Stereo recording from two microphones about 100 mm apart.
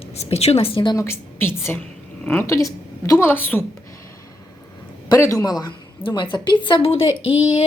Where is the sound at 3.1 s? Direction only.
20° left (ahead or behind).